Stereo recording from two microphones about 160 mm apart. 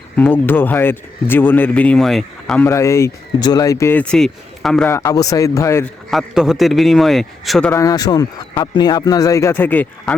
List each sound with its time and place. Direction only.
0.2 s speech: 10° left (ahead or behind)
2.6 s speech: 20° left (ahead or behind); by 4.9 s centre (ahead or behind)
4.9 s speech: 15° left (ahead or behind)
5.8 s a man's voice: centre (ahead or behind)
7.8 s speech: 25° left (ahead or behind)